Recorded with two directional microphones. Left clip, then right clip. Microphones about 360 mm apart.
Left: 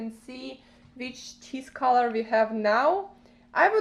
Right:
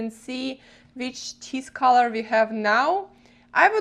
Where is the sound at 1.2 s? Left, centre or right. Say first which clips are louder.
Right 6 dB; right.